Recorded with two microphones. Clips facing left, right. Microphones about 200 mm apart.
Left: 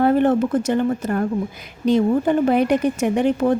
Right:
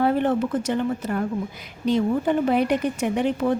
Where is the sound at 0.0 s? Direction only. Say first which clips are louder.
Left 5 dB; 50° left (ahead or behind).